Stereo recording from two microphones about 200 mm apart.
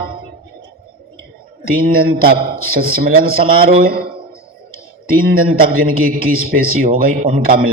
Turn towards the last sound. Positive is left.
turn(degrees=-45)  # may be behind; listen again after turning